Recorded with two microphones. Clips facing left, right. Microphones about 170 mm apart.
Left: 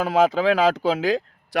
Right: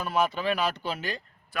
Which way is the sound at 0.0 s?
90° left.